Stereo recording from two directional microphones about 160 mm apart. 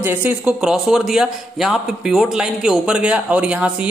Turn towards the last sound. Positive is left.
turn(degrees=-5)  # may be behind; listen again after turning